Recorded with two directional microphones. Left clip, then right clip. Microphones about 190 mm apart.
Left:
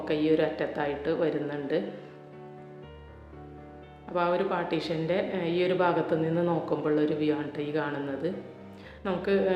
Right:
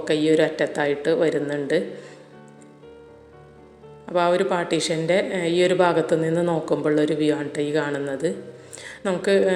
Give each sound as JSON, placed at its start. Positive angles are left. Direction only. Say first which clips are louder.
{"t": 0.0, "sound": "speech", "louder": "right 6 dB", "side_deg": -30}
{"t": 4.0, "sound": "speech", "louder": "right 7 dB", "side_deg": -35}
{"t": 8.8, "sound": "a sound", "louder": "right 7 dB", "side_deg": -35}